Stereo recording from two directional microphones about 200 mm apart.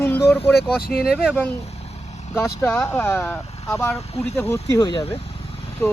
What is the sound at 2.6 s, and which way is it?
Speech, 10° left (ahead or behind).